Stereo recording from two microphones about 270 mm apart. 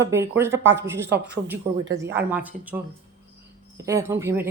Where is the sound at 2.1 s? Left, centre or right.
Centre.